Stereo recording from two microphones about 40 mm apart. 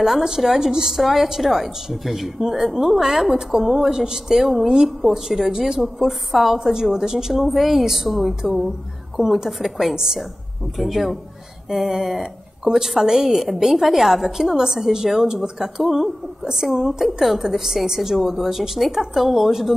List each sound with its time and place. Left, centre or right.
0.0 s a woman's voice: centre
5.8 s a woman's voice: centre
9.2 s a woman's voice: centre
9.5 s a woman's voice: centre